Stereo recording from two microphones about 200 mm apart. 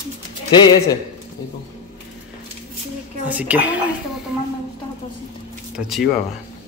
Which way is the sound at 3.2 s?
5° right (ahead or behind).